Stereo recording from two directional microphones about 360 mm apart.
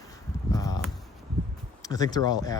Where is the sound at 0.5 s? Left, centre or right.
Centre.